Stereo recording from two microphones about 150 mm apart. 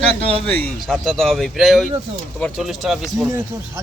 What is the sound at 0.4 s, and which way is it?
Speech, 10° left (ahead or behind).